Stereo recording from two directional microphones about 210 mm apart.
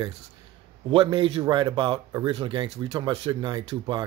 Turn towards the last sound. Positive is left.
turn(degrees=-25)  # may be behind; listen again after turning